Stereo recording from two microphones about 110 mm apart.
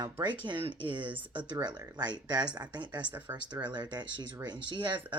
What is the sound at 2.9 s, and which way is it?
Speech, 15° right (ahead or behind).